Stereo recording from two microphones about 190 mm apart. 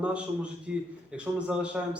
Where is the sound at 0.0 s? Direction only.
5° right (ahead or behind).